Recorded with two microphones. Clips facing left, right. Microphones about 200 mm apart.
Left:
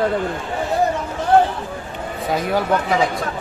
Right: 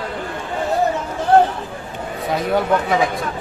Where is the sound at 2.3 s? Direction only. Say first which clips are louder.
Right 1 dB; centre (ahead or behind).